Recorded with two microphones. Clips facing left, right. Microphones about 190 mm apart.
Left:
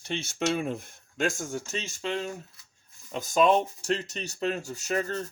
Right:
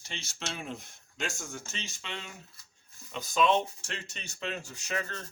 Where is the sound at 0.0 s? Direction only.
60° left (ahead or behind).